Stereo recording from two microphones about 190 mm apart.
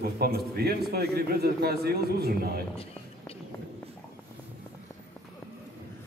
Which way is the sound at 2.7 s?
30° left (ahead or behind).